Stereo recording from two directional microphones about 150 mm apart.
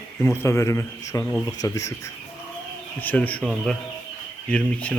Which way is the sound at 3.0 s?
10° left (ahead or behind).